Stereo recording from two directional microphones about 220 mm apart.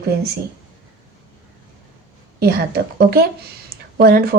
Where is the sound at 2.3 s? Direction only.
45° right (ahead or behind).